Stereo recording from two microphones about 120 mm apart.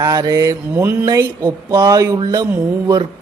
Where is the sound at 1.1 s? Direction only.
30° right (ahead or behind).